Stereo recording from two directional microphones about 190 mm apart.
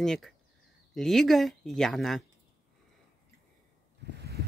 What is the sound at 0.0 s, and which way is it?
Speech, centre (ahead or behind).